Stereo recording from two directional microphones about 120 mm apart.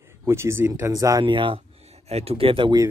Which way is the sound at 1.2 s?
45° right (ahead or behind).